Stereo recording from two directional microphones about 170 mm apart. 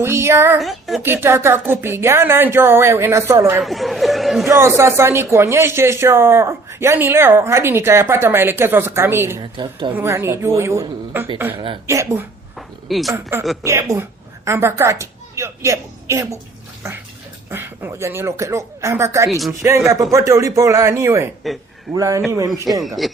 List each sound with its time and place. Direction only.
0.0 s speech: 15° right (ahead or behind)
0.6 s speech: centre (ahead or behind)
1.0 s speech: 15° right (ahead or behind)
3.6 s speech: centre (ahead or behind)
4.4 s speech: 15° right (ahead or behind)
9.4 s speech: 25° right (ahead or behind)
9.9 s speech: 15° right (ahead or behind)
12.5 s a sound: centre (ahead or behind)
13.4 s speech: centre (ahead or behind)
13.7 s a woman's voice: 20° right (ahead or behind)
17.5 s speech: 15° right (ahead or behind)
22.8 s speech: centre (ahead or behind)